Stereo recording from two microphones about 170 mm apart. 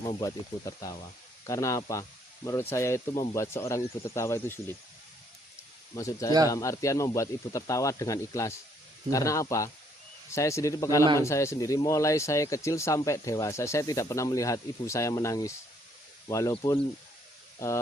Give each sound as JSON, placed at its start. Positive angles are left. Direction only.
{"t": 0.0, "sound": "speech", "side_deg": 20}
{"t": 5.9, "sound": "speech", "side_deg": 20}